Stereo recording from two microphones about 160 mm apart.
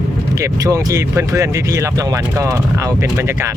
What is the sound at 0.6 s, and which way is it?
Speech, 20° right (ahead or behind).